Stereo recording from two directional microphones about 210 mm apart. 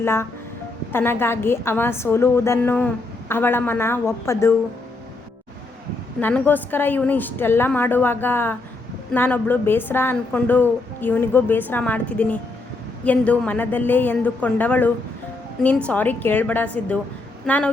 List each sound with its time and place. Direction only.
0.0 s a woman's voice: 10° left (ahead or behind)
6.1 s a woman's voice: 5° left (ahead or behind)